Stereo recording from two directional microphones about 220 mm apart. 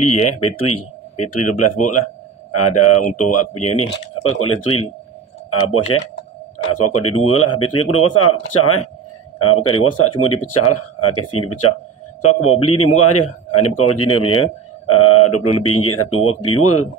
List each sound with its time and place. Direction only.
0.0 s speech: 90° left
6.7 s speech: 90° left
13.2 s a man's voice: 25° left (ahead or behind)
13.7 s speech: 90° left
15.1 s speech: 90° left